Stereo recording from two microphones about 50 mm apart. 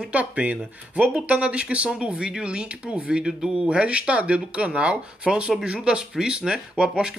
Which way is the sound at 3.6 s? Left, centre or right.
Right.